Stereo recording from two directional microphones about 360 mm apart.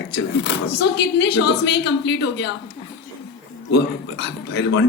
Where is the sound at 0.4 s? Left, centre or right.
Left.